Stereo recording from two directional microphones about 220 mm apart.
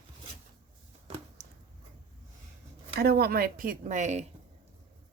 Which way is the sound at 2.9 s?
45° right (ahead or behind).